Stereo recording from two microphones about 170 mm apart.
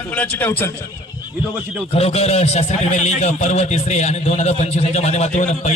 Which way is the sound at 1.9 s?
35° left (ahead or behind).